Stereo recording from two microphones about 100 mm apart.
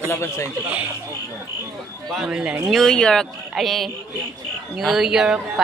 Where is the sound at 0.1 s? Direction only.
25° left (ahead or behind).